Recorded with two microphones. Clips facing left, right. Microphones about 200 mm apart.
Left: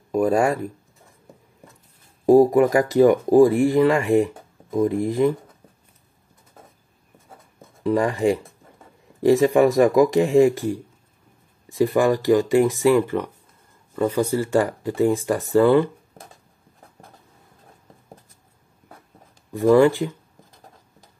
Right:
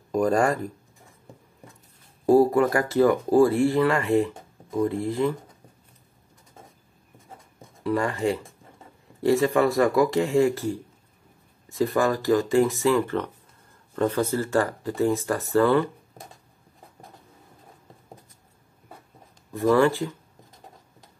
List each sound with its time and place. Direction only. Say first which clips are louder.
0.1 s speech: left 2 dB; 5° left (ahead or behind)
2.2 s speech: left 4 dB; 15° left (ahead or behind)
7.8 s speech: left 5 dB; 15° left (ahead or behind)
19.5 s speech: left 5 dB; 15° left (ahead or behind)